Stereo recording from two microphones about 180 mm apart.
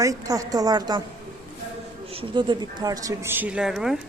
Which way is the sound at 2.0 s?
30° right (ahead or behind).